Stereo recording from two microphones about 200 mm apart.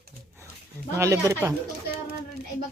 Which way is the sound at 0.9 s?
15° right (ahead or behind).